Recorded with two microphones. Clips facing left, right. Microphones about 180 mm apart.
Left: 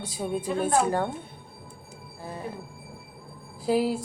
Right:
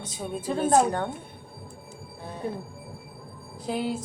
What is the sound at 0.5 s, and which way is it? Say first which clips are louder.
Speech: right 2 dB; 35° right (ahead or behind).